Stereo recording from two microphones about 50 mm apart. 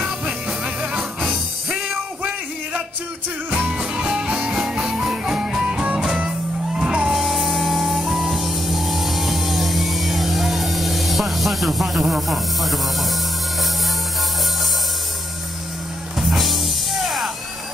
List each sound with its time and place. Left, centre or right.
0.5 s music: centre
1.7 s music: right
3.7 s music: centre
7.2 s music: centre
12.1 s speech: centre
16.2 s music: centre